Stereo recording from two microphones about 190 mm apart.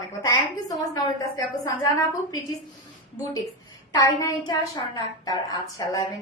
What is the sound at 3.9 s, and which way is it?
A woman's voice, 20° left (ahead or behind).